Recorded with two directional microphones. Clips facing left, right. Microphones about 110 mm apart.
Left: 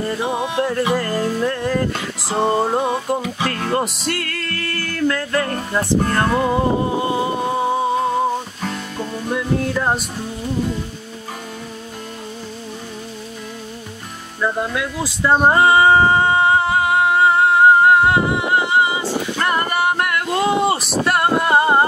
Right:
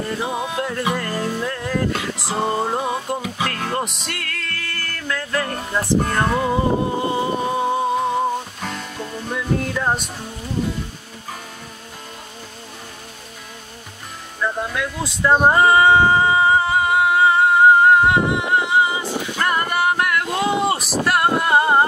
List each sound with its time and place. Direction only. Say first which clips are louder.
0.2 s music: left 3 dB; 20° left (ahead or behind)
0.6 s music: left 6 dB; centre (ahead or behind)
14.4 s a sound: left 2 dB; 5° left (ahead or behind)